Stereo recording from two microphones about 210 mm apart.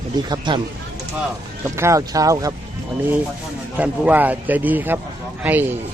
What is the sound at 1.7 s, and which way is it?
Speech, 15° right (ahead or behind).